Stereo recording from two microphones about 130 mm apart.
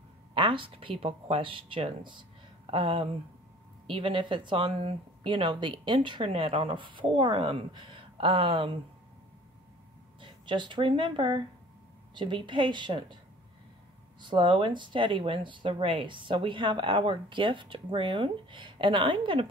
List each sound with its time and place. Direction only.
0.3 s speech: 40° right (ahead or behind)
10.4 s speech: 35° right (ahead or behind)
14.3 s speech: 40° right (ahead or behind)